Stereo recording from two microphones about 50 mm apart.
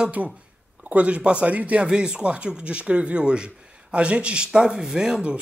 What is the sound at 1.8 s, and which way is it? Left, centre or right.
Speech, centre.